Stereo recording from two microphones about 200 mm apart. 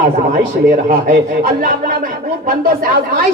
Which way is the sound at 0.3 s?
40° right (ahead or behind).